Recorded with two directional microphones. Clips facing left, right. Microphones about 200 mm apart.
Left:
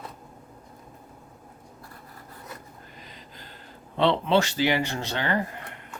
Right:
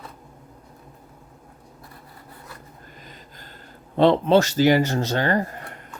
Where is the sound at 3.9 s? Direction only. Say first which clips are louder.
Right 6 dB; 45° right (ahead or behind).